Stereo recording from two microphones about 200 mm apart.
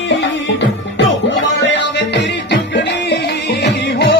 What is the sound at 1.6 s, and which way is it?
Music, 60° left (ahead or behind).